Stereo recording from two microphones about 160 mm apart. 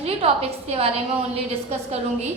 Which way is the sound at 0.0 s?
40° right (ahead or behind).